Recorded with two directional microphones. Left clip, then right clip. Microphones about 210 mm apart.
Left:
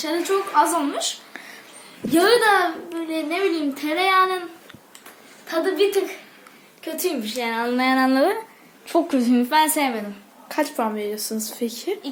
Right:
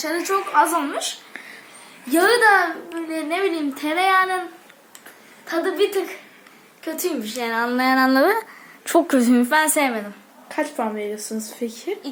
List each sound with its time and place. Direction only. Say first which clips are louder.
0.2 s a woman's voice: right 1 dB; 10° left (ahead or behind)
2.0 s a woman's voice: right 1 dB; 10° right (ahead or behind)
5.5 s speech: even; 5° right (ahead or behind)
6.8 s speech: even; 5° right (ahead or behind)
8.9 s a woman's voice: right 3 dB; 25° right (ahead or behind)
10.5 s speech: left 1 dB; 5° left (ahead or behind)